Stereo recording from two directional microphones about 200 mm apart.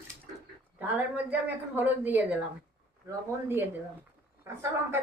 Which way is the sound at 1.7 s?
10° right (ahead or behind).